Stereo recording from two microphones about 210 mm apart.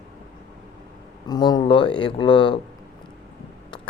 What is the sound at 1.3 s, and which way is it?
Speech, 20° left (ahead or behind).